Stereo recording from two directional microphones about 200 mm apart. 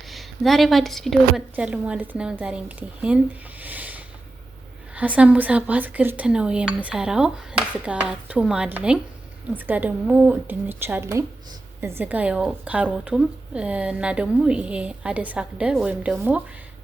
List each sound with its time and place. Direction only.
0.1 s a woman's voice: centre (ahead or behind)
3.6 s a sound: 10° right (ahead or behind)
4.9 s a woman's voice: 5° right (ahead or behind)